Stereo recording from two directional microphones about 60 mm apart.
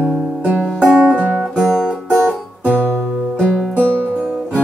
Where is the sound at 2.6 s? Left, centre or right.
Right.